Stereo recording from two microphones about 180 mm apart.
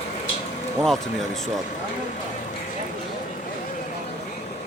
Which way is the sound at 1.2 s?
Centre (ahead or behind).